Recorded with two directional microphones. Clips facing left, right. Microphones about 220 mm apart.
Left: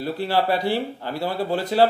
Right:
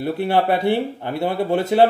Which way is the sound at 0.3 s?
20° right (ahead or behind).